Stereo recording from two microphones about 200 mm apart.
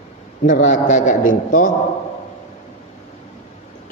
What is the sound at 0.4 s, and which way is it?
A man's voice, 40° left (ahead or behind).